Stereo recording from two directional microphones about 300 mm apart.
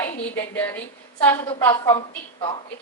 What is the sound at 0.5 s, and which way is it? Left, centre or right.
A woman's voice, centre.